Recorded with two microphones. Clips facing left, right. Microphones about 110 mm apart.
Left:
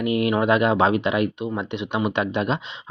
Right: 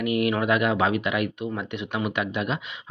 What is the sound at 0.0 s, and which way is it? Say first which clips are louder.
Speech: left 3 dB; 25° left (ahead or behind).